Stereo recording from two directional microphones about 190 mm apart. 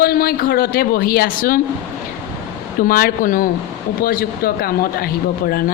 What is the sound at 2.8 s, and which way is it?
A woman's voice, 50° left (ahead or behind).